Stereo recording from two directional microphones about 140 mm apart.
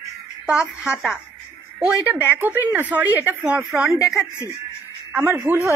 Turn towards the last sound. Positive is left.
turn(degrees=-15)  # may be behind; listen again after turning